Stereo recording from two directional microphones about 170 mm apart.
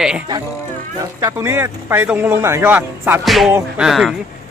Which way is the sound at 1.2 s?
15° right (ahead or behind).